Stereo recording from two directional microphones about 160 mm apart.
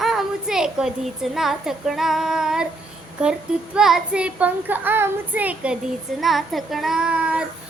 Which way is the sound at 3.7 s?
5° right (ahead or behind).